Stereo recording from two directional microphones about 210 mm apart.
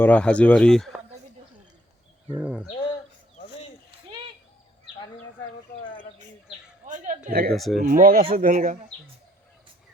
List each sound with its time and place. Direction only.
0.0 s speech: 5° left (ahead or behind)
2.3 s speech: 5° right (ahead or behind)
6.8 s a sound: 35° right (ahead or behind)
7.3 s speech: 45° right (ahead or behind)
7.5 s speech: centre (ahead or behind)
7.9 s speech: 40° right (ahead or behind)